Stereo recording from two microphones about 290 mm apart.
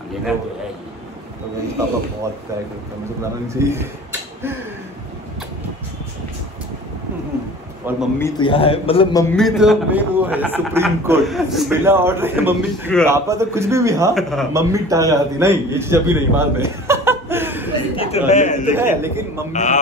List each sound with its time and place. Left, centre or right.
3.4 s a man's voice: centre
7.8 s speech: centre
8.2 s a man's voice: centre
14.1 s a man's voice: centre
14.5 s a man's voice: centre
17.9 s a man's voice: left
18.8 s a man's voice: centre
19.5 s a man's voice: left